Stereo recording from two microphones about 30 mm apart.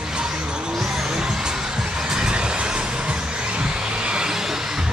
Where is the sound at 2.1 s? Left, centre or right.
Right.